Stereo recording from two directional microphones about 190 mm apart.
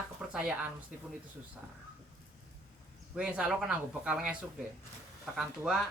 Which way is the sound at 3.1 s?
5° right (ahead or behind).